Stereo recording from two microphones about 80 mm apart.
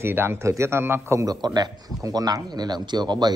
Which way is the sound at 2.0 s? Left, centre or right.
Right.